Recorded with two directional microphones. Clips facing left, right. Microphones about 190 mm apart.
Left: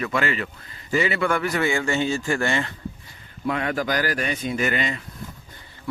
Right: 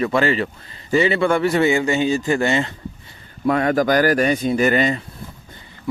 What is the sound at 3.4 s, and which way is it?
Speech, 45° right (ahead or behind).